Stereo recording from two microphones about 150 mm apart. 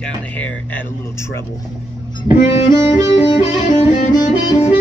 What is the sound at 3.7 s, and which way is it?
Music, 55° left (ahead or behind).